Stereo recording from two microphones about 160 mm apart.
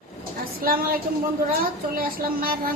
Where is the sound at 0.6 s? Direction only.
65° right (ahead or behind).